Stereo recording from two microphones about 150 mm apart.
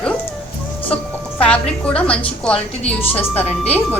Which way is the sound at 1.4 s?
5° left (ahead or behind).